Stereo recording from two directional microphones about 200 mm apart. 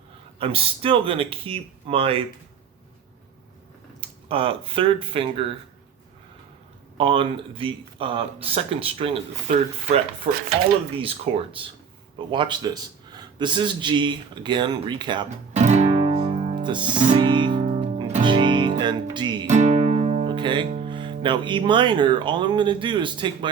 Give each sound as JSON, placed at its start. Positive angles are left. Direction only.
{"t": 0.3, "sound": "a man's voice", "side_deg": -30}
{"t": 4.3, "sound": "a man's voice", "side_deg": -25}
{"t": 6.9, "sound": "a man's voice", "side_deg": -25}
{"t": 15.6, "sound": "guitar", "side_deg": -35}
{"t": 16.6, "sound": "a man's voice", "side_deg": -25}
{"t": 17.2, "sound": "music", "side_deg": -25}
{"t": 19.5, "sound": "music", "side_deg": -35}
{"t": 20.8, "sound": "a man's voice", "side_deg": -25}